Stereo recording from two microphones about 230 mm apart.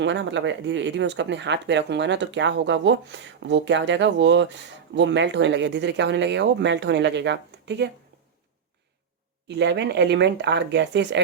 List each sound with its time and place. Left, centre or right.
0.0 s speech: right
9.6 s speech: right